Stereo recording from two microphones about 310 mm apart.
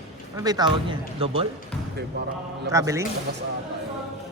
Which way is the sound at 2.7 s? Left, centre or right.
Centre.